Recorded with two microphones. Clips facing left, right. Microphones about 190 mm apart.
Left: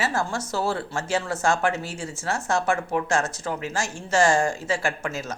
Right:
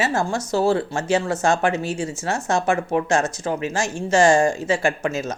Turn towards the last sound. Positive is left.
turn(degrees=-20)  # may be behind; listen again after turning